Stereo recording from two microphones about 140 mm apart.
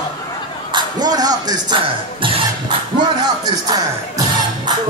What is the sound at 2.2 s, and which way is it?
Music, 40° right (ahead or behind).